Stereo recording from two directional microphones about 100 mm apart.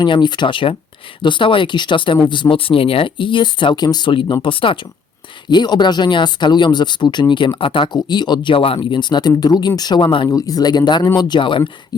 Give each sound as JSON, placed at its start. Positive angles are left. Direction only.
{"t": 0.0, "sound": "speech", "side_deg": 50}
{"t": 5.5, "sound": "speech", "side_deg": 45}
{"t": 10.2, "sound": "speech", "side_deg": 40}